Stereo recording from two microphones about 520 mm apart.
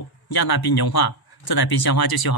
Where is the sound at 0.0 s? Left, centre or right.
Left.